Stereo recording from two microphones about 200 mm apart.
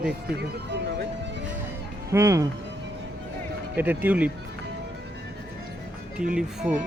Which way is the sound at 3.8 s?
10° right (ahead or behind).